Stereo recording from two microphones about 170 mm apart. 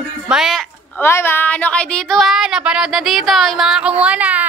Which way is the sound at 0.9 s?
15° left (ahead or behind).